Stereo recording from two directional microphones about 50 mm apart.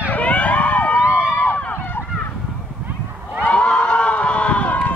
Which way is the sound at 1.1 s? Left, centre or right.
Left.